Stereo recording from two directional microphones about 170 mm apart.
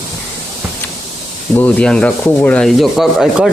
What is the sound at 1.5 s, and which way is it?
Rub, 5° left (ahead or behind).